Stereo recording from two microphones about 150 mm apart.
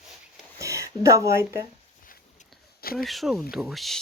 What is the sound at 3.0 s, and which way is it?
Speech, centre (ahead or behind).